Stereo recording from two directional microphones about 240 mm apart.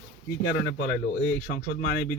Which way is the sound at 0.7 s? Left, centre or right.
Left.